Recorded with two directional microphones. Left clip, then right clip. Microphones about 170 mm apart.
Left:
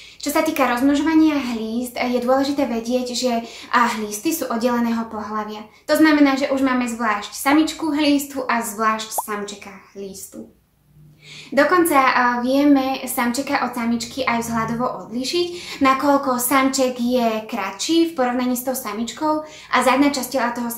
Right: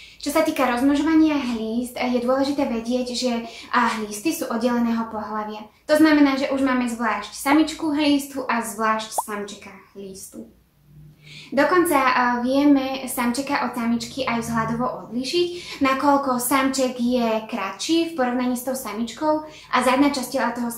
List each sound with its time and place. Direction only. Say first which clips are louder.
0.2 s a woman's voice: left 2 dB; 20° left (ahead or behind)
11.5 s a woman's voice: left 3 dB; 20° left (ahead or behind)